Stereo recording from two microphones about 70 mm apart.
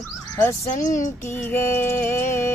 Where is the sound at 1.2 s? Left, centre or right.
Left.